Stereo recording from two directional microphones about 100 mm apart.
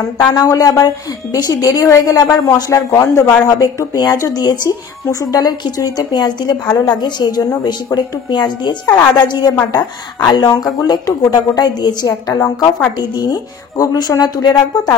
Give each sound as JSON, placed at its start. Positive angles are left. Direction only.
{"t": 0.2, "sound": "a woman's voice", "side_deg": 40}